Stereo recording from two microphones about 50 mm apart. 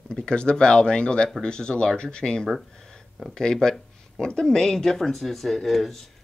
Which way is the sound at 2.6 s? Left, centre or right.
Centre.